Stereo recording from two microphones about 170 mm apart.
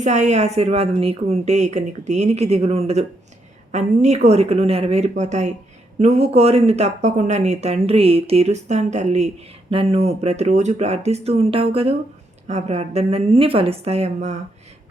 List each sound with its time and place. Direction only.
0.0 s speech: 45° right (ahead or behind)